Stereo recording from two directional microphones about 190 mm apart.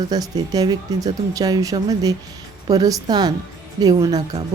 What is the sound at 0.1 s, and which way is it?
A woman's voice, 20° right (ahead or behind).